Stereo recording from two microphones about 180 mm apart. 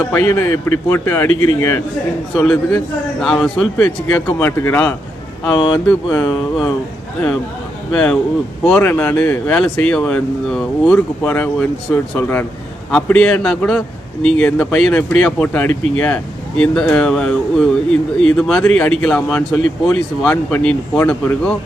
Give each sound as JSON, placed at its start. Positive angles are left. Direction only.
{"t": 0.1, "sound": "a man's voice", "side_deg": 15}
{"t": 2.4, "sound": "a man's voice", "side_deg": 0}
{"t": 5.5, "sound": "speech", "side_deg": 20}
{"t": 7.9, "sound": "a man's voice", "side_deg": 5}